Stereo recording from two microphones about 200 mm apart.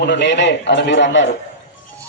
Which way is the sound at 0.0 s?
60° left (ahead or behind).